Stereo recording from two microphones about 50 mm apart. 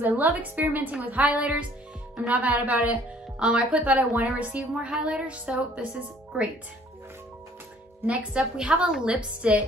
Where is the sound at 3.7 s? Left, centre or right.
Right.